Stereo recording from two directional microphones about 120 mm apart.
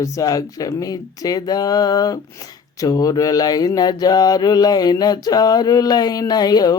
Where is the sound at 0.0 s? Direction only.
30° left (ahead or behind).